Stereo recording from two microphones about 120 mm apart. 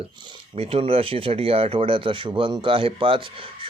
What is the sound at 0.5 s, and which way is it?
Speech, 55° right (ahead or behind).